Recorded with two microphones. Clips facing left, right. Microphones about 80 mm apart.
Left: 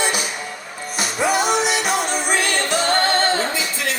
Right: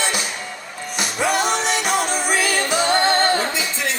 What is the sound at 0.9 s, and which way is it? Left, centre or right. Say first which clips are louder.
Music: left 1 dB; centre.